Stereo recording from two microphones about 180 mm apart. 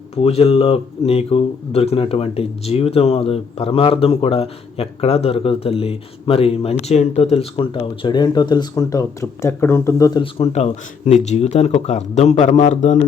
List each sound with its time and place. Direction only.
0.2 s speech: 35° left (ahead or behind); by 10.2 s 15° left (ahead or behind)
10.3 s speech: 35° left (ahead or behind)